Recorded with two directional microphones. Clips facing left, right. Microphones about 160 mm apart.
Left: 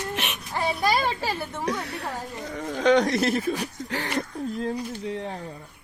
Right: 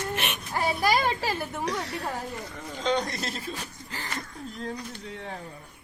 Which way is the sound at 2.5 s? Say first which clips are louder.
Left 8 dB; 70° left (ahead or behind).